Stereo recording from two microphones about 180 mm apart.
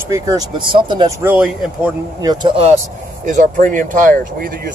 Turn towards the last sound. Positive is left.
turn(degrees=-50)  # may be behind; listen again after turning